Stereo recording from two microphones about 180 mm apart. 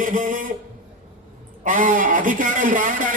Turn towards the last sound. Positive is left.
turn(degrees=-50)  # may be behind; listen again after turning